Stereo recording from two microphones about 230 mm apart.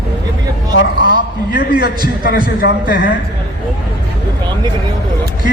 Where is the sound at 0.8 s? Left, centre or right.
Left.